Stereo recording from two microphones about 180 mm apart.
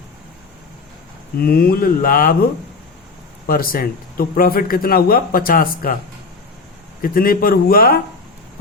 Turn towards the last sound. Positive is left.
turn(degrees=55)  # may be behind; listen again after turning